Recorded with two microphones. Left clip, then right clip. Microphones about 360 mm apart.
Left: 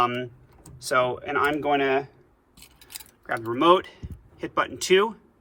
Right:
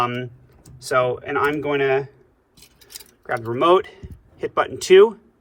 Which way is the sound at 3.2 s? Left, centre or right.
Centre.